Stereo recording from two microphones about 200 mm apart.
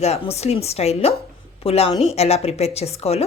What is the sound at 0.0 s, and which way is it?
Speech, 30° left (ahead or behind).